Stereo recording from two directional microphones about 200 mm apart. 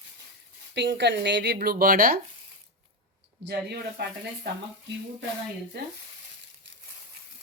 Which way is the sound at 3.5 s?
55° right (ahead or behind).